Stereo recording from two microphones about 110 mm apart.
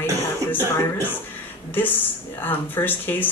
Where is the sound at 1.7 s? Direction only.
20° left (ahead or behind).